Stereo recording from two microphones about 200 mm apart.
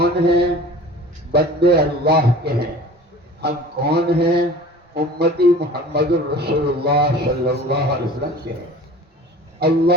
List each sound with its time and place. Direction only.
0.0 s a sound: 55° right (ahead or behind)
1.3 s speech: 55° right (ahead or behind)
9.6 s speech: 55° right (ahead or behind)